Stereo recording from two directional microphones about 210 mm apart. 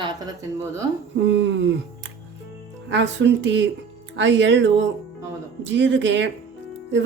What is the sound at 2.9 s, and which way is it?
Speech, 60° right (ahead or behind).